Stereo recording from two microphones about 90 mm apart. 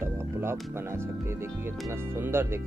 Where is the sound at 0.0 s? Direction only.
30° right (ahead or behind).